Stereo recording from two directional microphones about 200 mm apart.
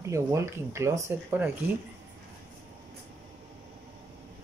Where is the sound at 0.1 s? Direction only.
15° right (ahead or behind).